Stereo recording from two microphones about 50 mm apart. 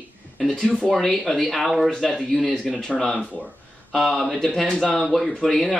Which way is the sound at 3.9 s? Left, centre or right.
Centre.